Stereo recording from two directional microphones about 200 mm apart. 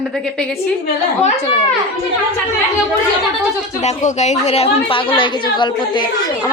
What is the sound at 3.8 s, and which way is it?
A woman's voice, 35° left (ahead or behind).